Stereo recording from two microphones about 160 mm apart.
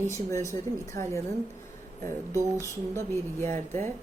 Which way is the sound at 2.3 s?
15° right (ahead or behind).